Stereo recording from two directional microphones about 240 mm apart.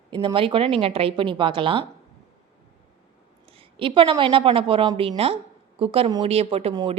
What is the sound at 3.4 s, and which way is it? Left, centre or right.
A woman's voice, right.